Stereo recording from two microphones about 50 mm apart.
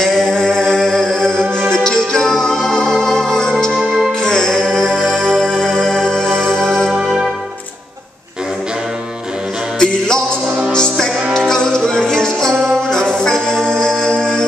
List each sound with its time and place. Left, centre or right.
0.0 s a sound: centre
1.7 s music: centre
9.8 s music: centre